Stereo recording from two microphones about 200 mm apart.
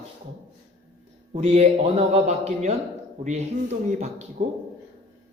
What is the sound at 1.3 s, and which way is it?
A man's voice, 30° right (ahead or behind).